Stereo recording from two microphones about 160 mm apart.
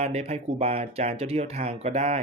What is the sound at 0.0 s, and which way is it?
Speech, 40° right (ahead or behind).